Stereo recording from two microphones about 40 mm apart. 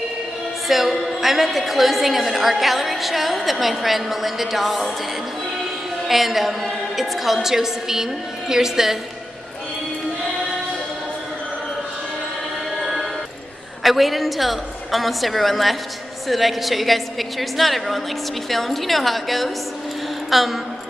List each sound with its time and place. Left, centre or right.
0.7 s a woman's voice: centre
6.0 s a woman's voice: centre
13.8 s a woman's voice: centre
20.2 s a sound: centre